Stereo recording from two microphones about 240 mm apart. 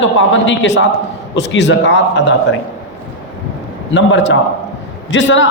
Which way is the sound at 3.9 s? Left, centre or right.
Left.